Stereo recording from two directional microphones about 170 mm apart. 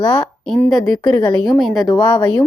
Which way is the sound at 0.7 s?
Centre (ahead or behind).